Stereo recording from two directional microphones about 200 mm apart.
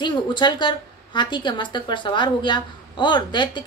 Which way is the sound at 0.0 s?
20° left (ahead or behind).